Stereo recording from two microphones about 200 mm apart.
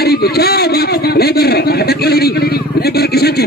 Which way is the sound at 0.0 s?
50° left (ahead or behind).